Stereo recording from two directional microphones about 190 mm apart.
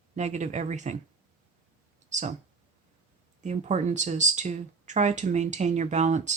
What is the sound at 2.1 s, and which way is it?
Speech, 40° right (ahead or behind).